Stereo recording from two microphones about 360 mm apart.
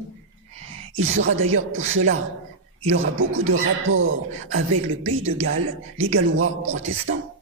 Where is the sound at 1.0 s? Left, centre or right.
Right.